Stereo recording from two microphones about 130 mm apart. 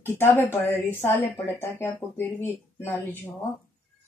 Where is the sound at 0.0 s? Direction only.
20° left (ahead or behind).